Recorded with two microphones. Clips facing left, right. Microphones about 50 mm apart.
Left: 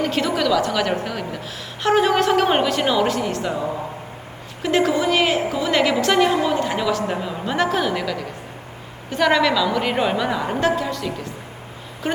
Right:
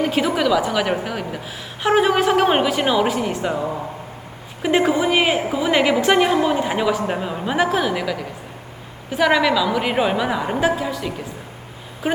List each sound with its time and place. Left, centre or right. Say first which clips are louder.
0.0 s a woman's voice: right 2 dB; centre